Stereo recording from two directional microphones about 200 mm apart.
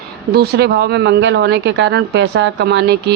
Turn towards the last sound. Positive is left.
turn(degrees=-55)  # may be behind; listen again after turning